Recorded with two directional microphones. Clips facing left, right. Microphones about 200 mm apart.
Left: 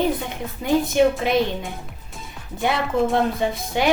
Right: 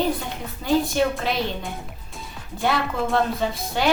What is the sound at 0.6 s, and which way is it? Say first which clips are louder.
Speech: left 3 dB; 20° left (ahead or behind).